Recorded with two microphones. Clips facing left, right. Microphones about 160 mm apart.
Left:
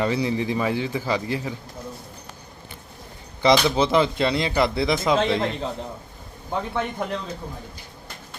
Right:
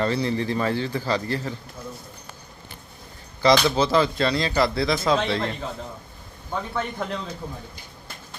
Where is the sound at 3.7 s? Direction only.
20° left (ahead or behind).